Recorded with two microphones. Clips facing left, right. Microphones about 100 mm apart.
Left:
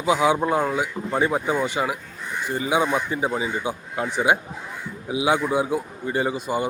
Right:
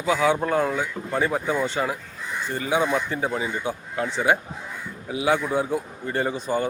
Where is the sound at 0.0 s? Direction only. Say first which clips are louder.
Left 2 dB; 15° left (ahead or behind).